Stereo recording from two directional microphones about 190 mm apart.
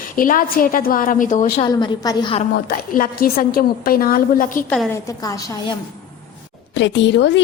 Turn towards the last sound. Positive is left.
turn(degrees=70)  # may be behind; listen again after turning